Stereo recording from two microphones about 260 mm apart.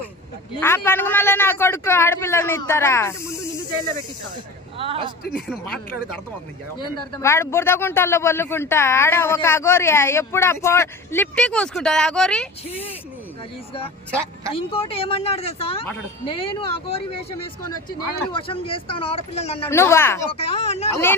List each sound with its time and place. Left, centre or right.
0.6 s speech: centre
4.8 s a woman's voice: right
5.3 s speech: centre
6.7 s speech: centre
14.5 s speech: left
19.7 s speech: centre
20.3 s speech: left
20.9 s speech: centre